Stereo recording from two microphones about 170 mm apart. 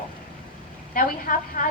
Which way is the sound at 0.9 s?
55° left (ahead or behind).